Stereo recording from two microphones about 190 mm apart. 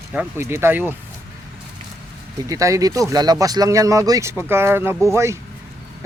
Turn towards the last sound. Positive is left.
turn(degrees=-15)  # may be behind; listen again after turning